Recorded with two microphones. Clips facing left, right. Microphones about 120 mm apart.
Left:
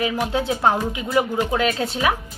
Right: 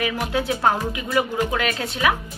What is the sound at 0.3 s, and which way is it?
Speech, 25° left (ahead or behind).